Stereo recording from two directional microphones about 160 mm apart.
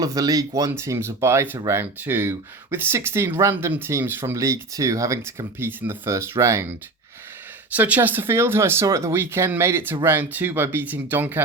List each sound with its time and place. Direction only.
0.0 s speech: 20° right (ahead or behind)